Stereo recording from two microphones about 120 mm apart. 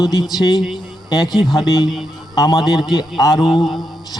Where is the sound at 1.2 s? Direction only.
Centre (ahead or behind).